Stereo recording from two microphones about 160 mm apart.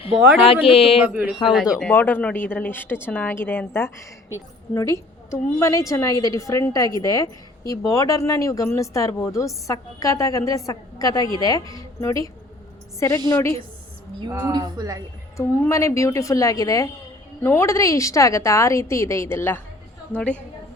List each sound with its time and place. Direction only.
0.2 s speech: 5° right (ahead or behind)
0.4 s speech: 35° left (ahead or behind)
1.0 s speech: 10° right (ahead or behind)
1.9 s a woman's voice: 10° left (ahead or behind)
14.3 s speech: 25° right (ahead or behind)
15.4 s a woman's voice: 20° left (ahead or behind)